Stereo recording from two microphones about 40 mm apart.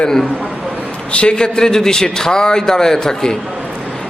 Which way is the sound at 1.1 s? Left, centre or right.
Left.